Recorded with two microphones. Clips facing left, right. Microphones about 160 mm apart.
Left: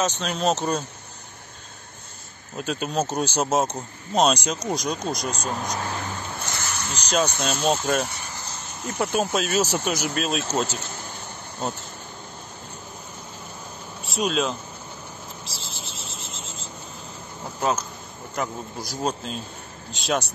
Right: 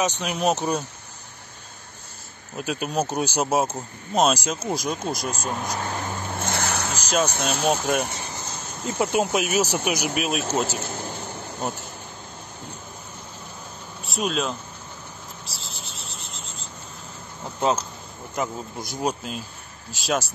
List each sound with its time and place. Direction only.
0.0 s speech: 15° right (ahead or behind)
2.5 s speech: 5° right (ahead or behind)
6.3 s insect: 60° right (ahead or behind)
7.1 s speech: centre (ahead or behind)
14.0 s speech: centre (ahead or behind)
15.4 s a sound: centre (ahead or behind)
17.6 s speech: 20° right (ahead or behind)
18.9 s speech: 5° right (ahead or behind)